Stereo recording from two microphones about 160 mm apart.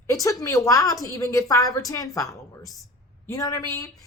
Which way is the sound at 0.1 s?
20° left (ahead or behind).